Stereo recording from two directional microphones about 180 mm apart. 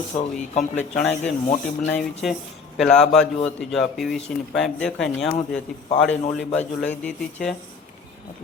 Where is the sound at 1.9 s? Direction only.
5° left (ahead or behind).